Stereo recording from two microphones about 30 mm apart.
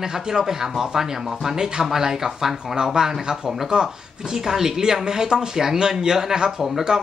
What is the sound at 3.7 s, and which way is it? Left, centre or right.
Speech, right.